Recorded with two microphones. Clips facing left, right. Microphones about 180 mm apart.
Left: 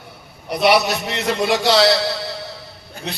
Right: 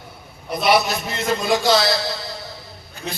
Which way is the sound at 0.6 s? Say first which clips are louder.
Left 2 dB; 70° left (ahead or behind).